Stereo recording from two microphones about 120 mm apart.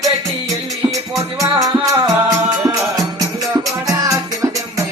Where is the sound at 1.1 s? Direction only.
25° right (ahead or behind).